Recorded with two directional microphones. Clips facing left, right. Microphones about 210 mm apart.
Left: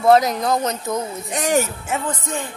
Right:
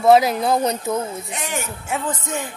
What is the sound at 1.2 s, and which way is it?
Speech, 40° left (ahead or behind).